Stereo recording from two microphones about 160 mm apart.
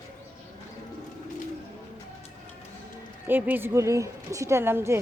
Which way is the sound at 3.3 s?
10° right (ahead or behind).